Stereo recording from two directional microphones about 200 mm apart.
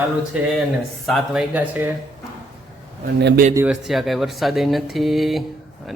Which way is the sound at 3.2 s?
55° right (ahead or behind).